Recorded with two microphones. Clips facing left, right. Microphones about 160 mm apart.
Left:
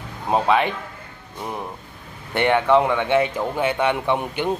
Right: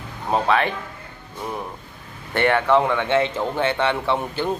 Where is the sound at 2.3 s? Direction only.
15° left (ahead or behind).